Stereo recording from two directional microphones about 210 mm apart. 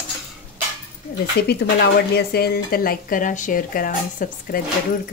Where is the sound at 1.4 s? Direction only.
50° left (ahead or behind).